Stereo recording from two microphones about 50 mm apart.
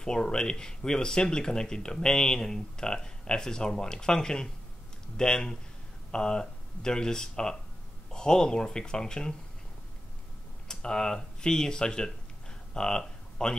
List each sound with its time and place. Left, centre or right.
0.0 s speech: centre
10.7 s speech: centre
12.7 s a sound: centre